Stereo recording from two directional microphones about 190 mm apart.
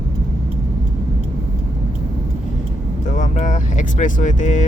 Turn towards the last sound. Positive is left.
turn(degrees=40)  # may be behind; listen again after turning